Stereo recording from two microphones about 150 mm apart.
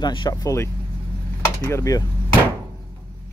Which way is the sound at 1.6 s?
20° left (ahead or behind).